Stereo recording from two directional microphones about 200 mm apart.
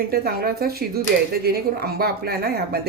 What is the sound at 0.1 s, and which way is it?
A woman's voice, 50° right (ahead or behind).